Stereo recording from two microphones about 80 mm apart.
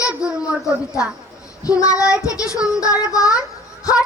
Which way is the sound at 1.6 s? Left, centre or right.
Left.